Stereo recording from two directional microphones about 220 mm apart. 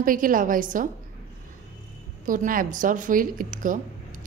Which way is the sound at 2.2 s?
40° right (ahead or behind).